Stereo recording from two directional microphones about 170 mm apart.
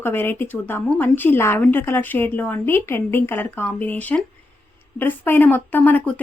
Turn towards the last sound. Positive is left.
turn(degrees=10)  # may be behind; listen again after turning